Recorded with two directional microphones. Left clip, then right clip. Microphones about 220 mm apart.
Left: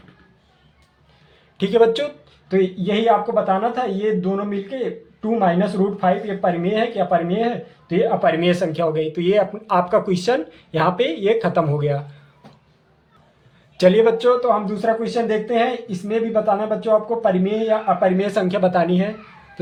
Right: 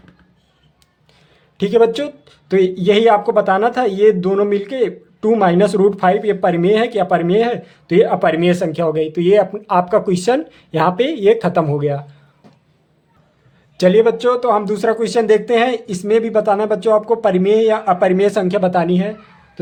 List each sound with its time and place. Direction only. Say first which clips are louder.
1.5 s speech: right 2 dB; 25° right (ahead or behind)
13.7 s speech: right 2 dB; 20° right (ahead or behind)